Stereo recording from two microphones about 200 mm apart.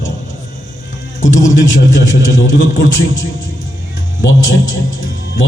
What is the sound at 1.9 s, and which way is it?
Speech, 70° left (ahead or behind).